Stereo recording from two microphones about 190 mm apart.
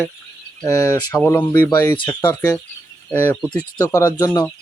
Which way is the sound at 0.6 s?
15° left (ahead or behind).